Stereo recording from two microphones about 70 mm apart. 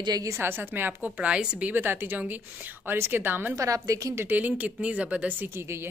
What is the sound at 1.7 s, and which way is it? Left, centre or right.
A woman's voice, right.